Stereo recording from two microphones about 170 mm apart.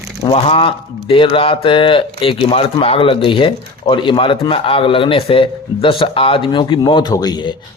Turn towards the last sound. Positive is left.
turn(degrees=25)  # may be behind; listen again after turning